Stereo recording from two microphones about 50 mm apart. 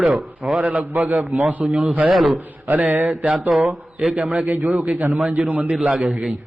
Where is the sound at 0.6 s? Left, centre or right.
Right.